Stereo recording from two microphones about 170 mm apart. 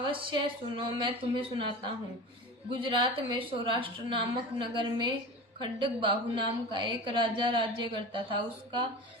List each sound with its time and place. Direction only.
0.0 s a woman's voice: 30° right (ahead or behind)